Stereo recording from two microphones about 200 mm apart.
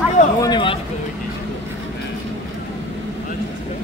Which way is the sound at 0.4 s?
20° left (ahead or behind).